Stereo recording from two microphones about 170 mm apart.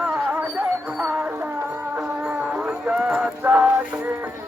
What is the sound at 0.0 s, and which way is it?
Music, 5° right (ahead or behind).